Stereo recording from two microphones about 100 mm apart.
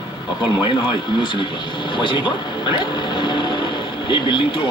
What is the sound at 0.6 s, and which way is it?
Speech, 50° left (ahead or behind).